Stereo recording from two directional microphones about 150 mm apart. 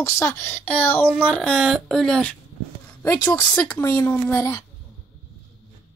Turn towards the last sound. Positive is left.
turn(degrees=15)  # may be behind; listen again after turning